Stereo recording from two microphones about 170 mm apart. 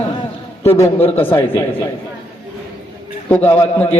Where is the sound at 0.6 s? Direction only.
15° left (ahead or behind).